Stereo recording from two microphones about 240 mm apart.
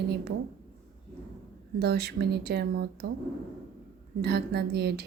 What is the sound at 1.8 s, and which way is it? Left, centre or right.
Speech, right.